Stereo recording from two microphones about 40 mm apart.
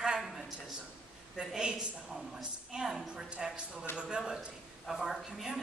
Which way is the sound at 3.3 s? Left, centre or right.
Right.